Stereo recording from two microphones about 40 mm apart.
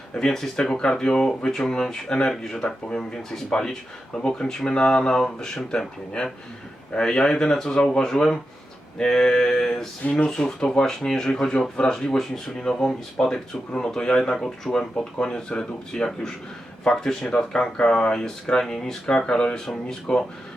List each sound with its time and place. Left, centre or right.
0.1 s speech: centre
6.9 s speech: centre
10.0 s speech: left
10.2 s speech: centre